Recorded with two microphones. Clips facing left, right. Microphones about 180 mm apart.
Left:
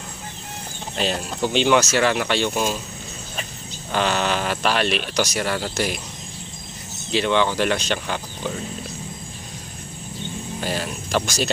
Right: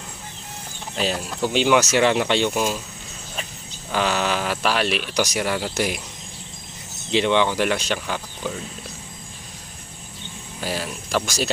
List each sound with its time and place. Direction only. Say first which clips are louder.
0.9 s speech: even; 5° right (ahead or behind); by 2.5 s 20° right (ahead or behind)
2.5 s speech: even; 5° right (ahead or behind)
3.9 s speech: left 1 dB; 5° right (ahead or behind)
7.1 s speech: right 1 dB; 20° right (ahead or behind)
10.6 s speech: even; 5° right (ahead or behind)